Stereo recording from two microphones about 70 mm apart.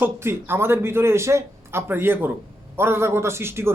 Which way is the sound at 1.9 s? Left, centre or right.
Right.